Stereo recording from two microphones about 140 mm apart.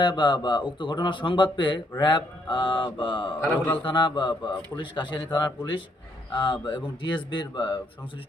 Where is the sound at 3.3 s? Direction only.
10° left (ahead or behind).